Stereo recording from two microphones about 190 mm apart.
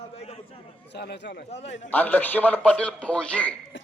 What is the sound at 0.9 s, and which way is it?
Speech, 60° left (ahead or behind).